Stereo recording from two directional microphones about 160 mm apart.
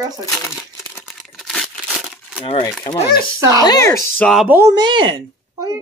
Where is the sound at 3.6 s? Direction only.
20° left (ahead or behind).